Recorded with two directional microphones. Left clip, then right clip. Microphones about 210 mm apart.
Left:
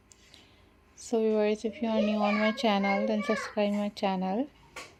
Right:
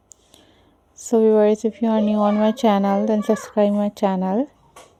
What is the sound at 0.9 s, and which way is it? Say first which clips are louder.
A woman's voice: right 12 dB; 40° right (ahead or behind).